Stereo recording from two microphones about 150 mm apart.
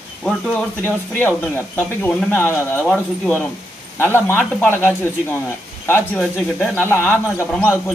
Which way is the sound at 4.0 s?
15° left (ahead or behind).